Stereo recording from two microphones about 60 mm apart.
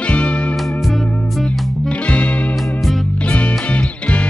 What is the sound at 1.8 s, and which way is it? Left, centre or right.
Music, centre.